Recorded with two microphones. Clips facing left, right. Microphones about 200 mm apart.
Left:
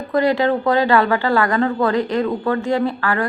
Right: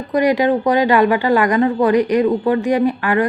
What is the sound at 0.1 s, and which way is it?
Speech, 15° right (ahead or behind).